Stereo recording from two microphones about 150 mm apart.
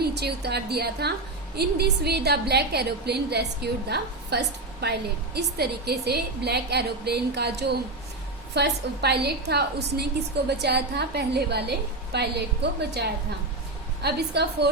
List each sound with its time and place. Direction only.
0.0 s a woman's voice: 90° right
14.0 s a woman's voice: 90° right